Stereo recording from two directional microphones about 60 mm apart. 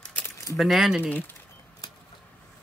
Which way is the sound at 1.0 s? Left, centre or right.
Left.